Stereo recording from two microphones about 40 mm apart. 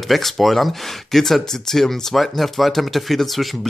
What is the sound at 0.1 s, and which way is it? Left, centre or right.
Speech, centre.